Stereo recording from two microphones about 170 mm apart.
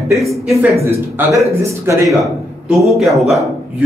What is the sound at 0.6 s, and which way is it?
Speech, 15° right (ahead or behind).